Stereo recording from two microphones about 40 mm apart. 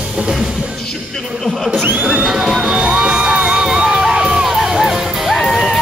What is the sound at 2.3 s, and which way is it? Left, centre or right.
Music, centre.